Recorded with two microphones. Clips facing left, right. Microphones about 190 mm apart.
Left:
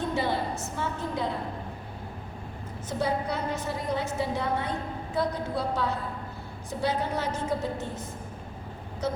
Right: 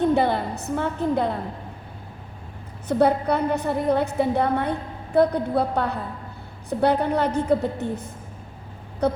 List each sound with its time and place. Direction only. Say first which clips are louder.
0.1 s a woman's voice: right 7 dB; 60° right (ahead or behind)
2.9 s a woman's voice: right 9 dB; 60° right (ahead or behind)